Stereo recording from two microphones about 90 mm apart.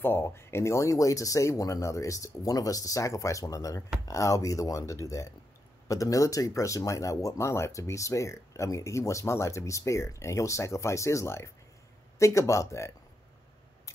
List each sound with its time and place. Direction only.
0.0 s speech: 25° left (ahead or behind)